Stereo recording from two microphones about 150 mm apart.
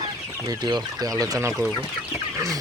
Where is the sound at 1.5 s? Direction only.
Centre (ahead or behind).